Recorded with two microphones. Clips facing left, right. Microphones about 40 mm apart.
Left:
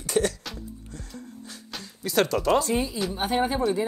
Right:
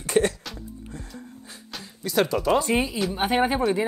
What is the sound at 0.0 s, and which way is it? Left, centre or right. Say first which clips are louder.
Music: right 3 dB; right.